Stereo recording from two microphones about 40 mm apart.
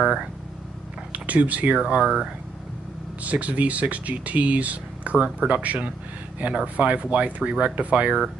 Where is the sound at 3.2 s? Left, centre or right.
Right.